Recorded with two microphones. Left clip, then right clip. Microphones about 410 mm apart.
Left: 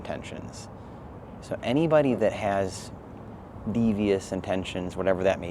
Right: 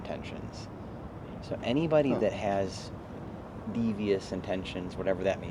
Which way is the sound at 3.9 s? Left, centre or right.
Left.